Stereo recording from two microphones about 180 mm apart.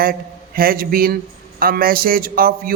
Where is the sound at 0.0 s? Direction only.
55° right (ahead or behind).